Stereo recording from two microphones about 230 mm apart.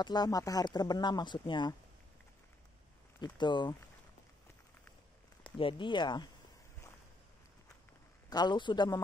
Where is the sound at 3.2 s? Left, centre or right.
Centre.